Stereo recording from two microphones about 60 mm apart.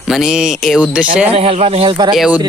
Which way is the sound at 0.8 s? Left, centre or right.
Right.